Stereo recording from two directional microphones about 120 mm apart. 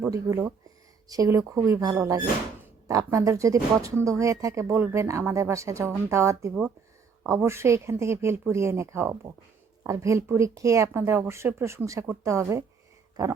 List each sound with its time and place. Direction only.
0.1 s speech: 25° right (ahead or behind)